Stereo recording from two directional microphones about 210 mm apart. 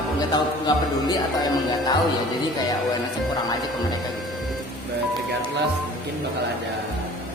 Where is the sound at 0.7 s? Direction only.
20° left (ahead or behind).